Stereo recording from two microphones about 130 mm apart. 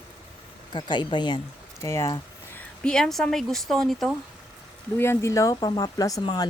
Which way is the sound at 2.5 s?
5° left (ahead or behind).